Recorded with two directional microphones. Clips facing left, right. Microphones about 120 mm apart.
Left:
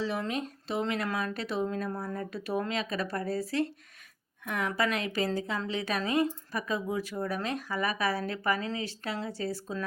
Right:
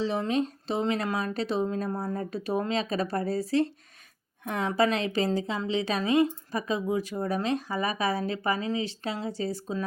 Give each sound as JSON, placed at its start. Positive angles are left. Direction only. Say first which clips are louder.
{"t": 0.0, "sound": "a woman's voice", "louder": "right 5 dB", "side_deg": -25}